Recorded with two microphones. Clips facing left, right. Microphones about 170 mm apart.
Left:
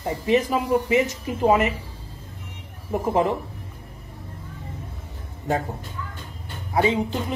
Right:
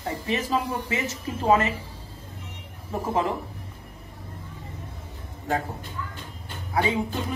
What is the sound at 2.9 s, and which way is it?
Speech, 20° left (ahead or behind).